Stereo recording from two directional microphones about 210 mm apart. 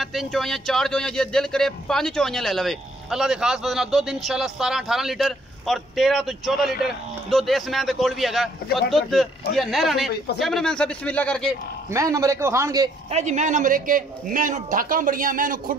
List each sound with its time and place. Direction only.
0.0 s speech: centre (ahead or behind)
11.9 s a man's voice: 15° right (ahead or behind)
13.1 s a man's voice: 35° right (ahead or behind)